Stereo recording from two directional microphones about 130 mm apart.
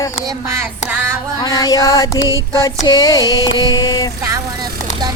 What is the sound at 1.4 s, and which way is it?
Female singing, 30° left (ahead or behind).